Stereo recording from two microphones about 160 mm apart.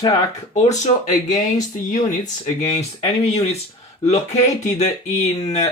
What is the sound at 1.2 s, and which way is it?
Speech, 50° left (ahead or behind).